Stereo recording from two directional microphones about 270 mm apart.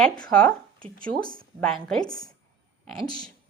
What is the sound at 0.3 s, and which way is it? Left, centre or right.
Speech, centre.